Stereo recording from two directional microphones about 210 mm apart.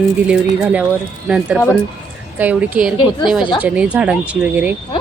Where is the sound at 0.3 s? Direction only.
5° right (ahead or behind).